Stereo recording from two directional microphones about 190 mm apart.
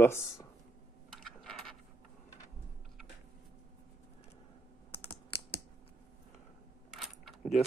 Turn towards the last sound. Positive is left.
turn(degrees=0)  # may be behind; listen again after turning